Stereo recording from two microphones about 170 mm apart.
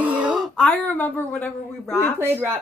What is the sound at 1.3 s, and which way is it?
Speech, 10° left (ahead or behind).